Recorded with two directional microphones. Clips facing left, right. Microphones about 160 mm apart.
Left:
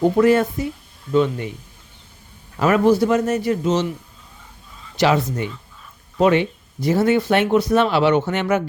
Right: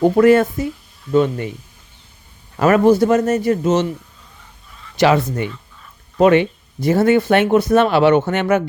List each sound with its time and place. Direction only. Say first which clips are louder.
0.0 s a man's voice: right 3 dB; 60° right (ahead or behind)
2.6 s a man's voice: right 3 dB; 50° right (ahead or behind)
4.9 s speech: right 3 dB; 60° right (ahead or behind)